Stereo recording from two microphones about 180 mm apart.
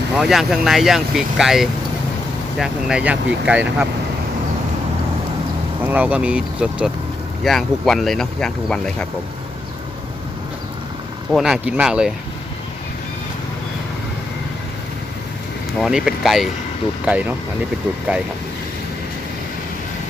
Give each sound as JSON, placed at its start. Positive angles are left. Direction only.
{"t": 0.2, "sound": "speech", "side_deg": 0}
{"t": 5.8, "sound": "speech", "side_deg": -10}
{"t": 11.3, "sound": "speech", "side_deg": 0}
{"t": 15.8, "sound": "speech", "side_deg": -5}